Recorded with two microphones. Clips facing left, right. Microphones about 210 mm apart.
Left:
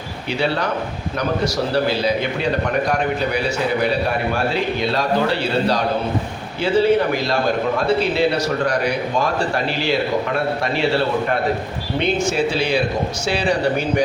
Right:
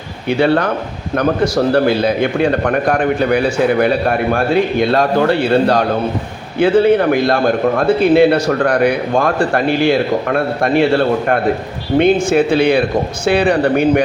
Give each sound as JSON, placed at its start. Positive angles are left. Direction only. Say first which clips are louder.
{"t": 0.3, "sound": "a man's voice", "louder": "right 8 dB", "side_deg": -55}
{"t": 1.7, "sound": "a man's voice", "louder": "right 6 dB", "side_deg": -55}